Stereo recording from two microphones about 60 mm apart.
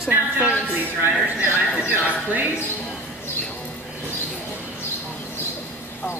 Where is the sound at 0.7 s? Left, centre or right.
Right.